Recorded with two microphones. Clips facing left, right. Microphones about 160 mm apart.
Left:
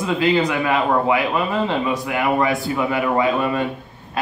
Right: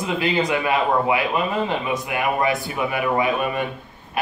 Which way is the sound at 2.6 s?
25° left (ahead or behind).